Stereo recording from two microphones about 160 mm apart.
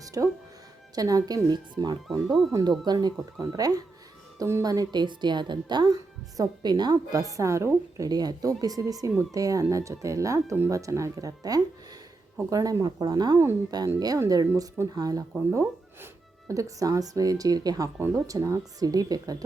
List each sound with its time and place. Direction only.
0.0 s music: 20° right (ahead or behind)
0.9 s speech: 25° right (ahead or behind)